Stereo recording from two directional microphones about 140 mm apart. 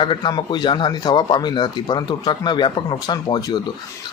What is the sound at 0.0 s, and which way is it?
Speech, 35° left (ahead or behind).